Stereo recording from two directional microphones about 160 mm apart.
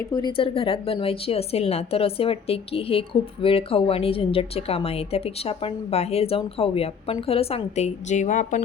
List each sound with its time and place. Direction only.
0.1 s a woman's voice: 25° left (ahead or behind); by 8.6 s 55° left (ahead or behind)